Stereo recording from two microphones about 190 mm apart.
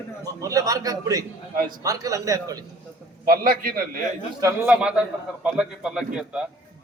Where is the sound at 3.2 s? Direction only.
45° right (ahead or behind).